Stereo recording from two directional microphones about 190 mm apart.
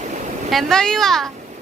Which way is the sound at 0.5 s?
5° left (ahead or behind).